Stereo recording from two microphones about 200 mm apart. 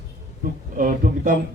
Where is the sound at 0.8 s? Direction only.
45° right (ahead or behind).